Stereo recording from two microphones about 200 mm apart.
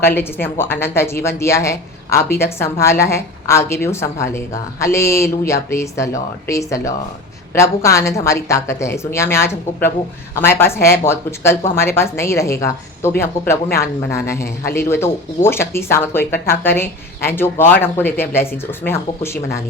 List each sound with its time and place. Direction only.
0.0 s speech: 10° left (ahead or behind)
14.4 s speech: 50° left (ahead or behind)
14.8 s speech: 10° left (ahead or behind)